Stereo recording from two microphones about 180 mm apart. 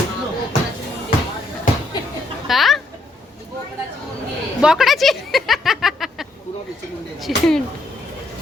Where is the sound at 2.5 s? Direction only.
Centre (ahead or behind).